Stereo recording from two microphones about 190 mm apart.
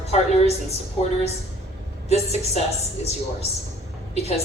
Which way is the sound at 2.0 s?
35° left (ahead or behind).